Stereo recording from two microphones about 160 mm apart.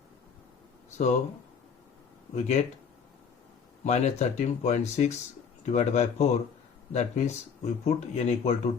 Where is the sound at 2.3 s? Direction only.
45° left (ahead or behind).